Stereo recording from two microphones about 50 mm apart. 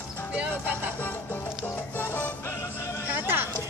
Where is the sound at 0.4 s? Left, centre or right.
Right.